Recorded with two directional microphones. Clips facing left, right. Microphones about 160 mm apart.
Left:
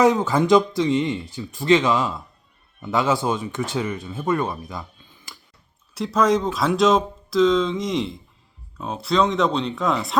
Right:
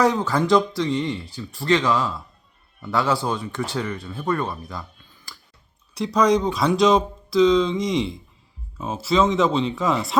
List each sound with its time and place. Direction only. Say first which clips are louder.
0.0 s speech: left 2 dB; 20° left (ahead or behind)
5.9 s speech: right 1 dB; centre (ahead or behind)